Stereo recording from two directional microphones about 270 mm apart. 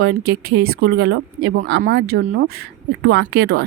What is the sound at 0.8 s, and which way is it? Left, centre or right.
Speech, right.